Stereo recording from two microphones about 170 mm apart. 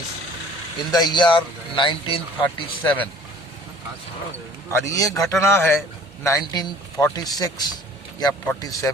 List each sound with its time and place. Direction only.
0.9 s speech: 25° left (ahead or behind)
2.8 s a man's voice: 10° left (ahead or behind)
4.7 s a man's voice: 20° left (ahead or behind)